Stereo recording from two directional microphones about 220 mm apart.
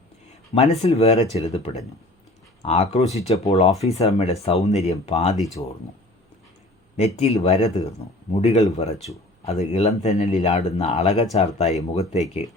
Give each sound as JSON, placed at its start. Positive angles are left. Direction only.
{"t": 0.5, "sound": "speech", "side_deg": 30}
{"t": 6.9, "sound": "speech", "side_deg": 30}